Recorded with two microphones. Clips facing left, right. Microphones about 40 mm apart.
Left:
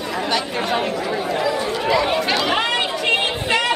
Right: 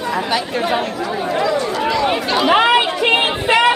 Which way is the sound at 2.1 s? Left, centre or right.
Centre.